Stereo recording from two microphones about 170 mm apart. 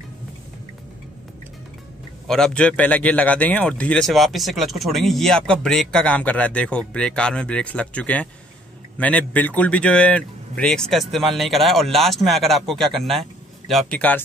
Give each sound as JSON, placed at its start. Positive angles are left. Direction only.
{"t": 2.2, "sound": "a man's voice", "side_deg": 5}